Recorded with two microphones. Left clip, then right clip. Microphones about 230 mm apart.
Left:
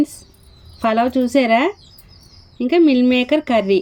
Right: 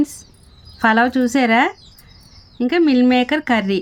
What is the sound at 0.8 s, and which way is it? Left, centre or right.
Speech, right.